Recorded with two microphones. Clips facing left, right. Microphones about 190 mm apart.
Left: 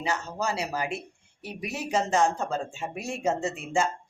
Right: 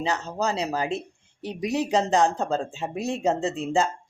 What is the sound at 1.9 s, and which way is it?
Speech, 35° right (ahead or behind).